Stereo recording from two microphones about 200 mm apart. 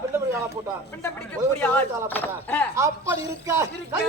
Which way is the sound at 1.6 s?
10° left (ahead or behind).